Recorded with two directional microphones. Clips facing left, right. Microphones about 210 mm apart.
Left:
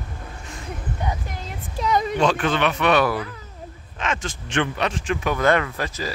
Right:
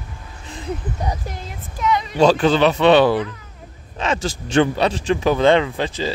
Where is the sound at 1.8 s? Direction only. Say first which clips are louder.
Right 1 dB; 45° left (ahead or behind).